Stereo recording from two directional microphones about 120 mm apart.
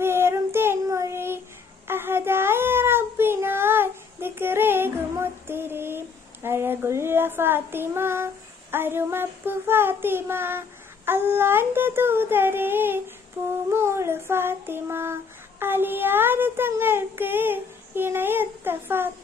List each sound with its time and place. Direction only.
0.0 s child singing: 20° right (ahead or behind)
1.9 s a sound: 20° right (ahead or behind)
13.7 s child singing: 20° right (ahead or behind)
15.6 s speech: 15° right (ahead or behind)